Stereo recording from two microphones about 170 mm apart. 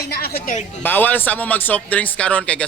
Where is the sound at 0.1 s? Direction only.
65° left (ahead or behind).